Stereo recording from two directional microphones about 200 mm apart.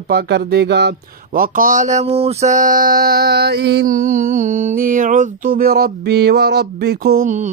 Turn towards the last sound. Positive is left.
turn(degrees=-40)  # may be behind; listen again after turning